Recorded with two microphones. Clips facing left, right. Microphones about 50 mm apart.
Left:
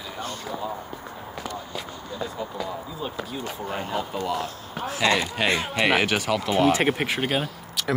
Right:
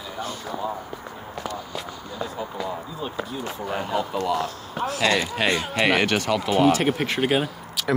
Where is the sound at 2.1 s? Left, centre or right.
Centre.